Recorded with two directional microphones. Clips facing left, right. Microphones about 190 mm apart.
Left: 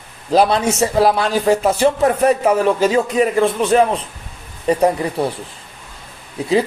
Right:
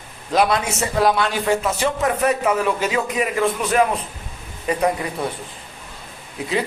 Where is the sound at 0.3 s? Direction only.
30° left (ahead or behind).